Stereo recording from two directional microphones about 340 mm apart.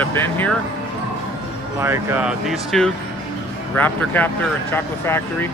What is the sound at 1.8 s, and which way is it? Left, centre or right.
Speech, centre.